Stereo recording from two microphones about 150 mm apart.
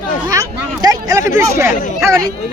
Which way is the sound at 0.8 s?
20° right (ahead or behind).